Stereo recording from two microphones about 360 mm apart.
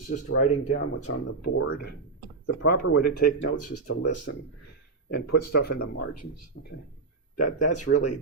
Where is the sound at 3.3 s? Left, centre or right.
Left.